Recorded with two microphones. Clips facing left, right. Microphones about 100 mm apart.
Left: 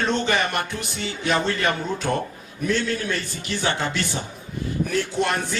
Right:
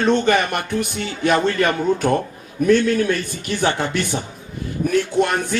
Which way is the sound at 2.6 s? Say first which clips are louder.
Right 8 dB; 55° right (ahead or behind).